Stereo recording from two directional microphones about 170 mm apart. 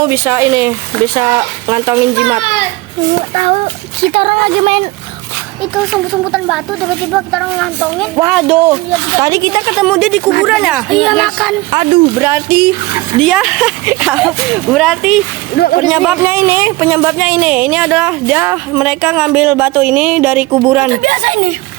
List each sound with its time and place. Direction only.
0.0 s speech: 15° right (ahead or behind)
3.3 s speech: 40° right (ahead or behind)
5.7 s speech: centre (ahead or behind)
8.7 s speech: 20° right (ahead or behind)
9.7 s speech: centre (ahead or behind)
11.7 s speech: 25° right (ahead or behind)
12.2 s speech: 10° right (ahead or behind)
15.6 s speech: 90° left
15.9 s speech: 5° right (ahead or behind)
20.9 s speech: 50° right (ahead or behind)